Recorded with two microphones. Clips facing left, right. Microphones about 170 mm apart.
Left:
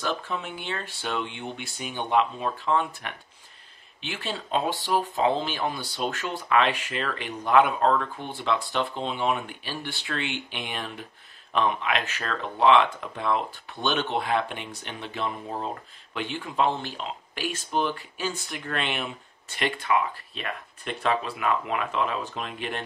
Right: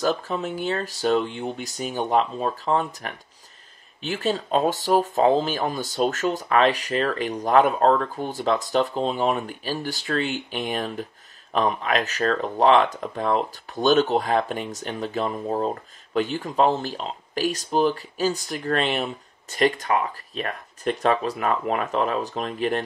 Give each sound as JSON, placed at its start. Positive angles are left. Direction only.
{"t": 0.0, "sound": "speech", "side_deg": -40}